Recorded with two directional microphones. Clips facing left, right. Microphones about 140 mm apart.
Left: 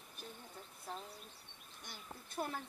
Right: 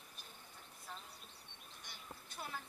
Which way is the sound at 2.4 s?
45° left (ahead or behind).